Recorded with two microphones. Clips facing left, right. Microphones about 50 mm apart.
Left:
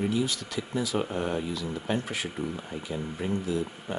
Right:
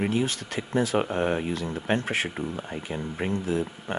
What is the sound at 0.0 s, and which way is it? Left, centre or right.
Speech, right.